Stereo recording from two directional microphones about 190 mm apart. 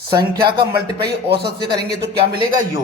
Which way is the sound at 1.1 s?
60° right (ahead or behind).